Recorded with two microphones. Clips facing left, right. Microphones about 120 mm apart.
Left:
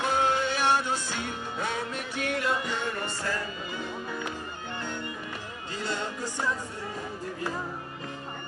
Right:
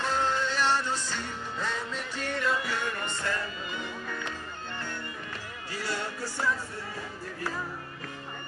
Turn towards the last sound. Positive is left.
turn(degrees=15)  # may be behind; listen again after turning